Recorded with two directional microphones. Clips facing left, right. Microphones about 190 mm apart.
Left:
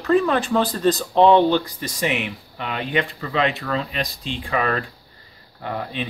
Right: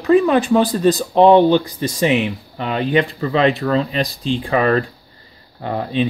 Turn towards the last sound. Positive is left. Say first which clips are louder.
# right 8 dB
turn(degrees=-30)  # may be behind; listen again after turning